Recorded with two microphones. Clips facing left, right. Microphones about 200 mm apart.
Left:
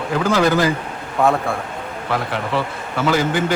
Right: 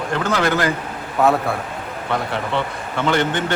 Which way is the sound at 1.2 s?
Centre (ahead or behind).